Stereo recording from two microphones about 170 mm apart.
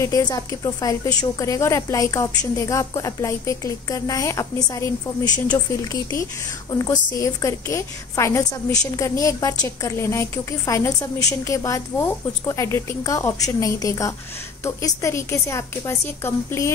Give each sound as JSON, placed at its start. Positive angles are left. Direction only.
{"t": 0.0, "sound": "a woman's voice", "side_deg": 20}
{"t": 6.7, "sound": "a woman's voice", "side_deg": 20}